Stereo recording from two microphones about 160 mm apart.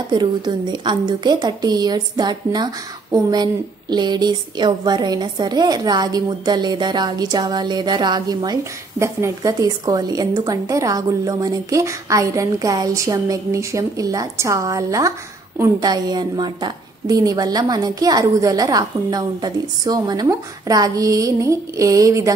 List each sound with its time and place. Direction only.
0.1 s a woman's voice: 30° right (ahead or behind)